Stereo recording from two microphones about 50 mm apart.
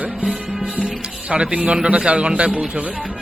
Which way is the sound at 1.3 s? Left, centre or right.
Centre.